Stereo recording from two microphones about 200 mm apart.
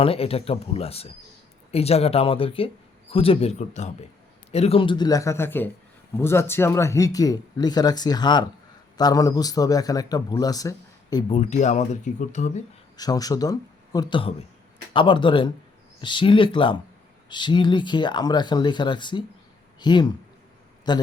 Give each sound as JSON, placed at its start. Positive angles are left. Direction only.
{"t": 0.0, "sound": "a man's voice", "side_deg": 30}
{"t": 11.3, "sound": "speech", "side_deg": 35}
{"t": 13.0, "sound": "a man's voice", "side_deg": 20}